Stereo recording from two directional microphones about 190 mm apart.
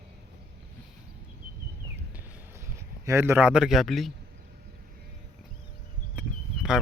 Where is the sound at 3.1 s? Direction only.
15° right (ahead or behind).